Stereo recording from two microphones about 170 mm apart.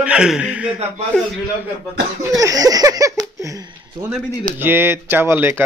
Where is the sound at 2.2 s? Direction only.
20° right (ahead or behind).